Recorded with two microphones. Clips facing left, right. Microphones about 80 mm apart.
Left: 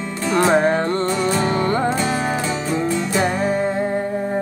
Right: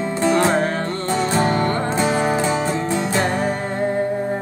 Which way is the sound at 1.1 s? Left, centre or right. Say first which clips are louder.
Right 1 dB; right.